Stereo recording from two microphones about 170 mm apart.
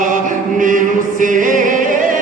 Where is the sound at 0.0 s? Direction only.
50° right (ahead or behind).